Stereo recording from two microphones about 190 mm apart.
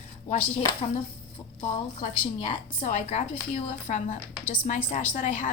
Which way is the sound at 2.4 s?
35° left (ahead or behind).